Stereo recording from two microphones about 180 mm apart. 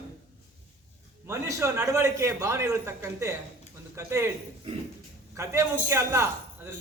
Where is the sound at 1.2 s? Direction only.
15° right (ahead or behind).